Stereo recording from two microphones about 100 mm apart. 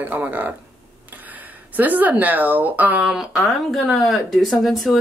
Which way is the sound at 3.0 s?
Centre (ahead or behind).